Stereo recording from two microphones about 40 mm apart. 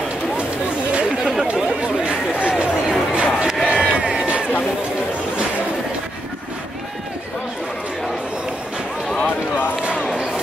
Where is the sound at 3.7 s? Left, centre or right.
Right.